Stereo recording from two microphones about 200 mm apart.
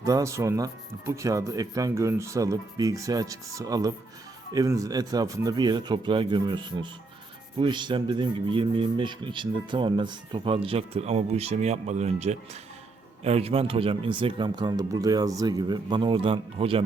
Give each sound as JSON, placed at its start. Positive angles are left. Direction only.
{"t": 0.0, "sound": "speech", "side_deg": -15}